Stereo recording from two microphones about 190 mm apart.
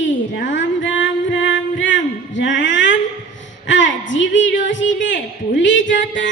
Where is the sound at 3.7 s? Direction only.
75° left (ahead or behind).